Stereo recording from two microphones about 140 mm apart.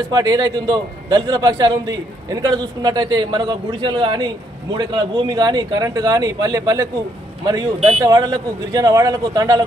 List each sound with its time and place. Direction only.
0.1 s speech: 25° right (ahead or behind)